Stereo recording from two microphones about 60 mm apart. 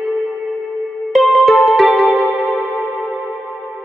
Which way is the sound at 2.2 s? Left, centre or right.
Left.